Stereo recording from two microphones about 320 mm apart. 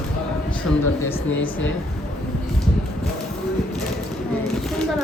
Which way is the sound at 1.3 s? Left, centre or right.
Left.